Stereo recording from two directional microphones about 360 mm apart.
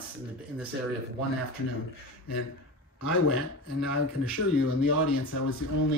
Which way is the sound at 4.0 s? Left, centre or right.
Left.